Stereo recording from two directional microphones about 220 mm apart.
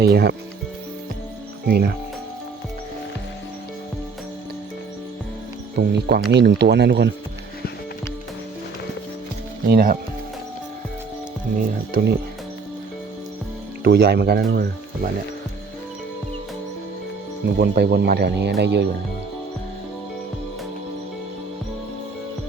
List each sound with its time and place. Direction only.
0.0 s speech: 45° right (ahead or behind)
1.6 s speech: 45° right (ahead or behind)
5.7 s speech: 50° right (ahead or behind)
9.6 s speech: 40° right (ahead or behind)
11.5 s speech: 45° right (ahead or behind)
13.8 s speech: 45° right (ahead or behind)
17.6 s speech: 50° right (ahead or behind)